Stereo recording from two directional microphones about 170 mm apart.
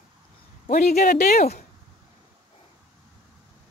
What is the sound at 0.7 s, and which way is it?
Speech, 50° left (ahead or behind).